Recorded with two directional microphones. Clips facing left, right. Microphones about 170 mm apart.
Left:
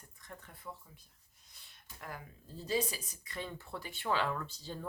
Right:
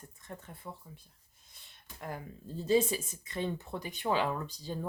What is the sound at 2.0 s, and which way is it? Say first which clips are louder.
Speech: right 6 dB; 25° right (ahead or behind).